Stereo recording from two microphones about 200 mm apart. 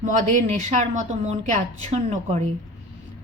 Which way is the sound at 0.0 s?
40° right (ahead or behind).